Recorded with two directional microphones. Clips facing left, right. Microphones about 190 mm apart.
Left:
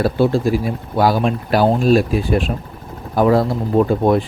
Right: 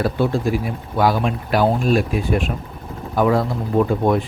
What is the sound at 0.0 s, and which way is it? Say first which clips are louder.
Speech: left 4 dB; 35° left (ahead or behind).